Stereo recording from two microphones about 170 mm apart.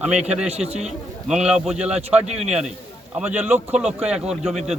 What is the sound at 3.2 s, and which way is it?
A man's voice, 10° right (ahead or behind).